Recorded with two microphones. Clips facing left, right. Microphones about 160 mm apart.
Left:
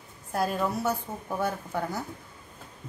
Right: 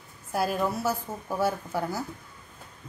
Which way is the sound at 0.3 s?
5° right (ahead or behind).